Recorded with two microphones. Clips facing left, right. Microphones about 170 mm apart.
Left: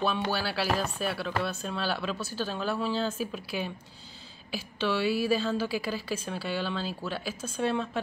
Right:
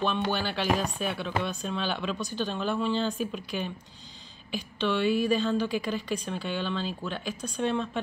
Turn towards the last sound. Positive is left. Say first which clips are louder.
# even
turn(degrees=5)  # may be behind; listen again after turning